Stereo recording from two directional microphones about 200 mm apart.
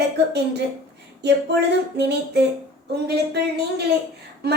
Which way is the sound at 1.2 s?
60° right (ahead or behind).